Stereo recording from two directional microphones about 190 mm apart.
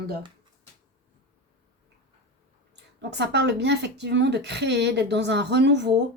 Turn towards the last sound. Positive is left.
turn(degrees=-65)  # may be behind; listen again after turning